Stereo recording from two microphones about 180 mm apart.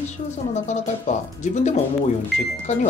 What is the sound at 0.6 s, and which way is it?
Speech, 40° left (ahead or behind).